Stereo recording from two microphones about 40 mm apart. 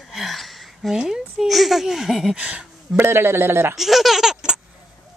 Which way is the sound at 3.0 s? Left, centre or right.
Right.